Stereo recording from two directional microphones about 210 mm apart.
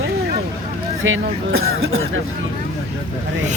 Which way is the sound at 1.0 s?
70° right (ahead or behind).